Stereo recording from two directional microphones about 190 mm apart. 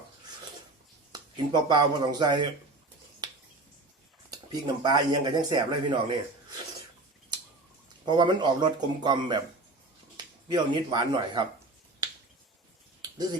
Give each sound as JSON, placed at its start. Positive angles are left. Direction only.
{"t": 1.1, "sound": "speech", "side_deg": -25}
{"t": 4.3, "sound": "speech", "side_deg": -25}
{"t": 8.0, "sound": "speech", "side_deg": -25}